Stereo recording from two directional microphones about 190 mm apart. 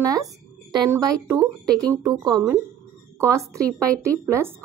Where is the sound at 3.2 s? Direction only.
15° right (ahead or behind).